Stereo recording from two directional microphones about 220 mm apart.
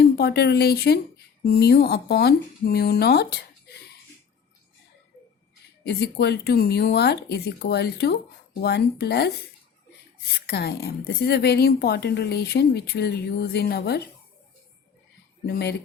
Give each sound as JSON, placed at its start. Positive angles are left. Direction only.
{"t": 0.0, "sound": "a woman's voice", "side_deg": 45}
{"t": 5.8, "sound": "a woman's voice", "side_deg": 45}
{"t": 10.4, "sound": "a woman's voice", "side_deg": 45}
{"t": 15.4, "sound": "a woman's voice", "side_deg": 50}